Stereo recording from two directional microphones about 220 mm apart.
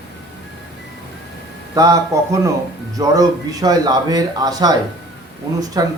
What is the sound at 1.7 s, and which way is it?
A man's voice, 15° right (ahead or behind).